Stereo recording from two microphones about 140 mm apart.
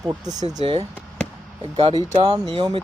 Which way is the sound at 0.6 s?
45° right (ahead or behind).